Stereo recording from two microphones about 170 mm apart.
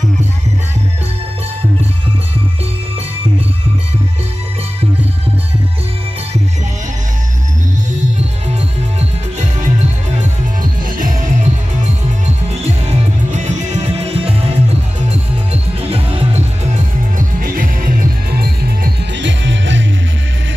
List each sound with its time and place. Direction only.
9.4 s music: 40° right (ahead or behind); by 18.7 s 65° right (ahead or behind)
19.1 s music: 90° right